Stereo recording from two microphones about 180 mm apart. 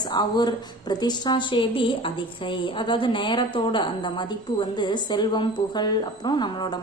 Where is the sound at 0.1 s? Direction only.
25° left (ahead or behind).